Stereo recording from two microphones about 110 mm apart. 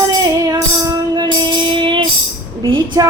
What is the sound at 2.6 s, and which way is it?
Speech, 50° right (ahead or behind).